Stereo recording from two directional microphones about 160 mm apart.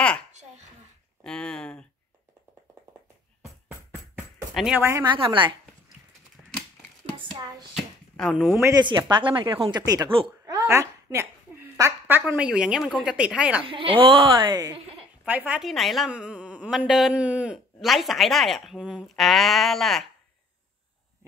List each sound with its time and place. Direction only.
1.2 s a sound: 5° left (ahead or behind)
4.6 s speech: 5° right (ahead or behind)
5.1 s speech: 30° right (ahead or behind)
7.2 s hands: 25° right (ahead or behind)
7.7 s a sound: centre (ahead or behind)
8.6 s speech: 25° right (ahead or behind); by 13.7 s 5° right (ahead or behind)
13.7 s speech: 35° right (ahead or behind)
15.2 s a woman's voice: 10° right (ahead or behind)